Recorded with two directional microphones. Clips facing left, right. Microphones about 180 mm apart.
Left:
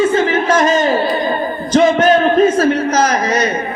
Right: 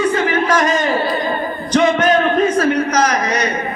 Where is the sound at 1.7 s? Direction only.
30° left (ahead or behind).